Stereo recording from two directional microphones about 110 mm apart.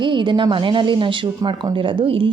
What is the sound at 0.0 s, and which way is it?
Speech, 45° right (ahead or behind).